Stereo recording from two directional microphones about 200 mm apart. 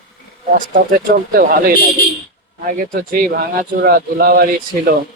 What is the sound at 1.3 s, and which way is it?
Speech, 45° right (ahead or behind).